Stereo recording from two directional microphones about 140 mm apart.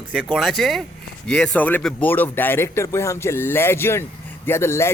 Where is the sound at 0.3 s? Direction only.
Centre (ahead or behind).